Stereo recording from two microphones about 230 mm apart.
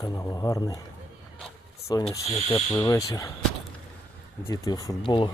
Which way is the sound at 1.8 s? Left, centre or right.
Centre.